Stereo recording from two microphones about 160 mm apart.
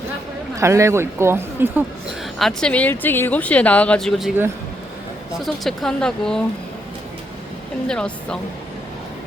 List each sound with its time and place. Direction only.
0.5 s a woman's voice: 20° right (ahead or behind)
2.4 s speech: 5° left (ahead or behind)
5.6 s speech: 5° left (ahead or behind)
7.9 s speech: 5° left (ahead or behind)